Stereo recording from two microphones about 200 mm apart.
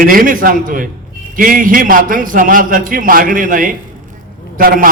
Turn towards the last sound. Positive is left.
turn(degrees=-45)  # may be behind; listen again after turning